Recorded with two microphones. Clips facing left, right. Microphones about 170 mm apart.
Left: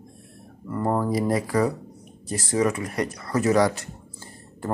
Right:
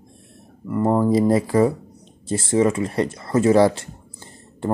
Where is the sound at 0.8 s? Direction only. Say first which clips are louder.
Right 6 dB; 20° right (ahead or behind).